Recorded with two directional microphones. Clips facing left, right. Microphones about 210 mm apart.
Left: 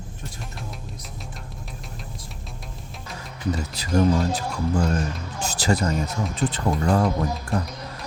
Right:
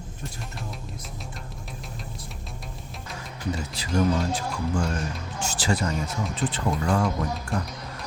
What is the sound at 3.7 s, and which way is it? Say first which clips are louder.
Speech: left 3 dB; 40° left (ahead or behind).